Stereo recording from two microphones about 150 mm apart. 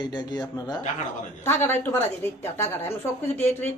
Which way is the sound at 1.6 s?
15° left (ahead or behind).